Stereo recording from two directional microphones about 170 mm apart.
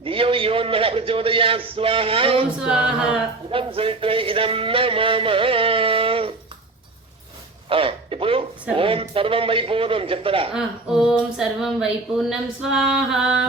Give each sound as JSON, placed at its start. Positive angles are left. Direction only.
{"t": 0.0, "sound": "a man's voice", "side_deg": -30}
{"t": 2.6, "sound": "speech", "side_deg": -5}
{"t": 3.5, "sound": "music", "side_deg": -30}
{"t": 7.7, "sound": "a man's voice", "side_deg": -30}
{"t": 10.5, "sound": "speech", "side_deg": -5}